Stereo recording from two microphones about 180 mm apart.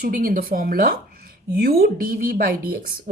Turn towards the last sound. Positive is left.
turn(degrees=-55)  # may be behind; listen again after turning